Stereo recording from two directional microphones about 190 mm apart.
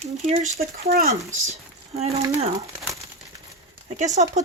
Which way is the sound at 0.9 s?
55° right (ahead or behind).